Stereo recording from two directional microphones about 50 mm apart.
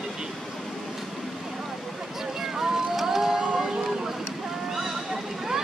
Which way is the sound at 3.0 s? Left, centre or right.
Centre.